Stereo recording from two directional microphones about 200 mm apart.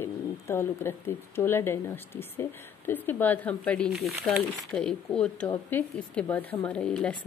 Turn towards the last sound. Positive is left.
turn(degrees=5)  # may be behind; listen again after turning